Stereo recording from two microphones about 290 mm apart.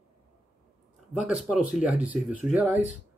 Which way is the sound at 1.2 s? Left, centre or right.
Centre.